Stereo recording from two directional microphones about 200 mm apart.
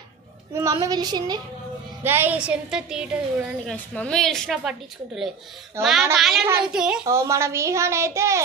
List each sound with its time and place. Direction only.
0.5 s a woman's voice: 15° right (ahead or behind); by 4.7 s centre (ahead or behind)
5.8 s a woman's voice: centre (ahead or behind)
7.0 s a child's voice: 15° right (ahead or behind)